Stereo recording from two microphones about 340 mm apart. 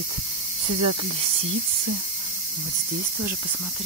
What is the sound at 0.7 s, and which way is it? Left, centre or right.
Speech, right.